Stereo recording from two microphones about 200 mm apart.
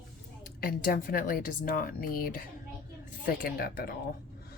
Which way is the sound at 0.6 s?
45° left (ahead or behind).